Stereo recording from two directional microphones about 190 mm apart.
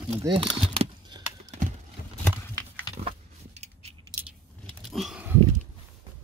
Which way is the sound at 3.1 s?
35° right (ahead or behind).